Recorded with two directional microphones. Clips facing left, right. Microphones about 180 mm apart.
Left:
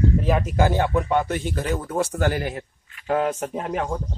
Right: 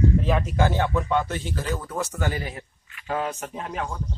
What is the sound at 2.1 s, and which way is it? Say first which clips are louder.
Speech: left 5 dB; 65° left (ahead or behind).